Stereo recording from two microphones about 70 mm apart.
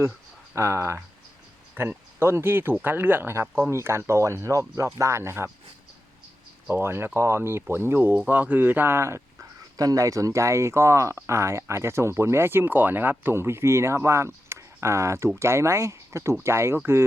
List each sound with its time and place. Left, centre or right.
0.5 s speech: right
1.7 s speech: right
6.7 s speech: right
9.7 s speech: right